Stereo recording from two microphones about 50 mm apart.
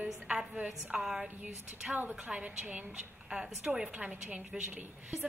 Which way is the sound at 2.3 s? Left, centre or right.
Right.